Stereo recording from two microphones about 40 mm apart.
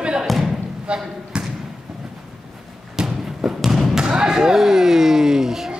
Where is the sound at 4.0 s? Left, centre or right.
Centre.